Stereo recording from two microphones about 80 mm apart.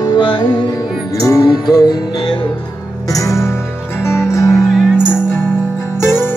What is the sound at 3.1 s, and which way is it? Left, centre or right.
Music, left.